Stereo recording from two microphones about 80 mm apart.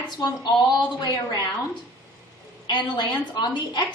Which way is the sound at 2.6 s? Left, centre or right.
Left.